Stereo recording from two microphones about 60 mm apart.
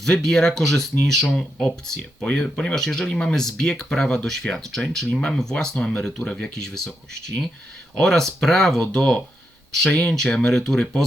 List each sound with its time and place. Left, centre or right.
0.0 s speech: centre
1.6 s speech: centre